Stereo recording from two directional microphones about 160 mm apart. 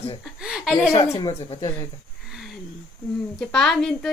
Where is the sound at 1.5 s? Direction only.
25° left (ahead or behind).